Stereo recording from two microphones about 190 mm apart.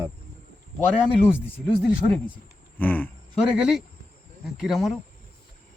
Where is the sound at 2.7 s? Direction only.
10° left (ahead or behind).